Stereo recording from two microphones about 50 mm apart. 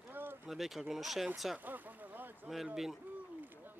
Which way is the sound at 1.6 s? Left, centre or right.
Right.